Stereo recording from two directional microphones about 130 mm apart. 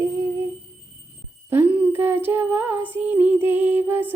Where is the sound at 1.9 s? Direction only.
20° right (ahead or behind).